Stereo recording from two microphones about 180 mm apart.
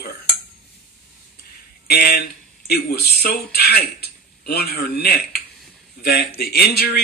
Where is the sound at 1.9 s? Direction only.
60° left (ahead or behind).